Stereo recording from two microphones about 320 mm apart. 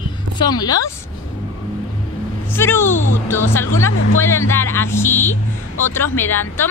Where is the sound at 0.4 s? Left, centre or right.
Centre.